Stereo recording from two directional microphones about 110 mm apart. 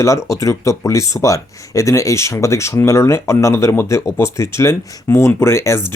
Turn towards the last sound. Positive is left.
turn(degrees=25)  # may be behind; listen again after turning